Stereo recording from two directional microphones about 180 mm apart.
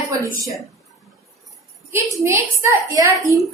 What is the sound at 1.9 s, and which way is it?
A woman's voice, 15° right (ahead or behind).